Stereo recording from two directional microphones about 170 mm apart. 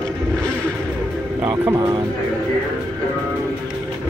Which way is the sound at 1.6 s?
20° right (ahead or behind).